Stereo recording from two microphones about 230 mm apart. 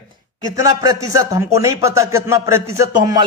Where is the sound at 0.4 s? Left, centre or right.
Centre.